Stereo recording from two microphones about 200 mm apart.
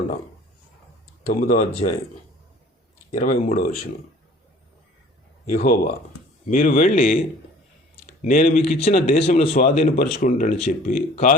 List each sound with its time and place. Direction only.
1.3 s a man's voice: 40° left (ahead or behind)
3.1 s a man's voice: 40° left (ahead or behind)
5.5 s a man's voice: 40° left (ahead or behind)
8.2 s a man's voice: 40° left (ahead or behind)